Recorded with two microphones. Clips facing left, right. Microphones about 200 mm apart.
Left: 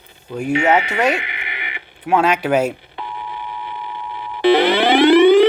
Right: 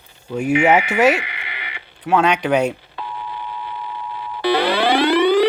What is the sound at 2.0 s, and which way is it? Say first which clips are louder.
Speech: even; 5° left (ahead or behind).